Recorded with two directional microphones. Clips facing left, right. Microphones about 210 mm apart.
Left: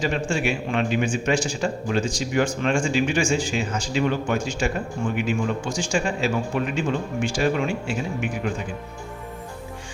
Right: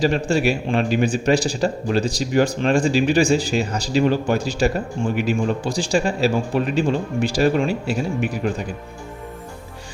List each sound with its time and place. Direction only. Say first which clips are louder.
0.0 s a man's voice: right 5 dB; 35° right (ahead or behind)